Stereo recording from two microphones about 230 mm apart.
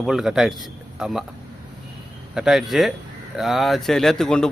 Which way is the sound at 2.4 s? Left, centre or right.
Centre.